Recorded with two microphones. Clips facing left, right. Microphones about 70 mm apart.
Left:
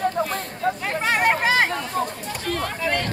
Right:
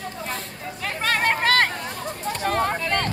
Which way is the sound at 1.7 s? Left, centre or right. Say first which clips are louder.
Left 6 dB; left.